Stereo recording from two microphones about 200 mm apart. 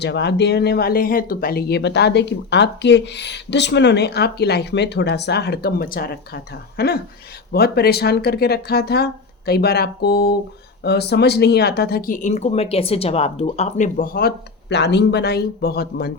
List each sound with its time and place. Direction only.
0.0 s speech: 55° left (ahead or behind)